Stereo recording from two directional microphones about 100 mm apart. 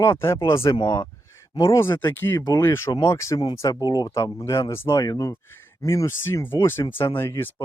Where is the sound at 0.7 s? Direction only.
40° left (ahead or behind).